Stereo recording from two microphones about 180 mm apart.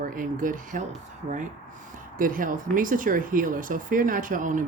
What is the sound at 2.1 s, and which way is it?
Speech, 50° right (ahead or behind).